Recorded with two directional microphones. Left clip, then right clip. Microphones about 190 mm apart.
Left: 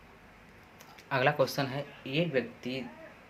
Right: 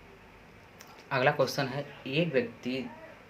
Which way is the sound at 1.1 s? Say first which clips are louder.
Right 1 dB; 10° left (ahead or behind).